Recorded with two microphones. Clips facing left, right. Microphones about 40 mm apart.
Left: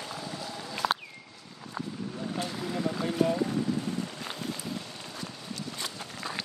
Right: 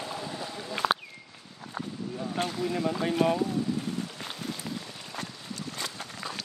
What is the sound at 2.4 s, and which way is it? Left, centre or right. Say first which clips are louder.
Vehicle: right 5 dB; right.